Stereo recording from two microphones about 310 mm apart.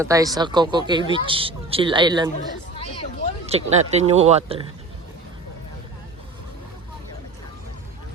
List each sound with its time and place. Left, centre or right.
0.0 s speech: centre
2.7 s a sound: centre
3.4 s speech: centre